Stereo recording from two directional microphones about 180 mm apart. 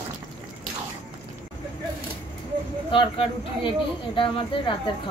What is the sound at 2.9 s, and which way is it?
Speech, 30° left (ahead or behind).